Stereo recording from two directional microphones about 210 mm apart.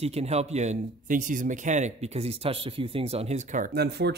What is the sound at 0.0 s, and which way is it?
Speech, 30° right (ahead or behind).